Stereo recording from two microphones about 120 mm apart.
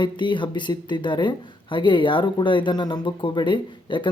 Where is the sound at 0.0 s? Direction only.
40° left (ahead or behind).